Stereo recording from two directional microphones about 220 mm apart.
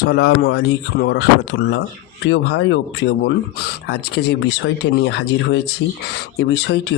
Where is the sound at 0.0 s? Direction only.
45° left (ahead or behind).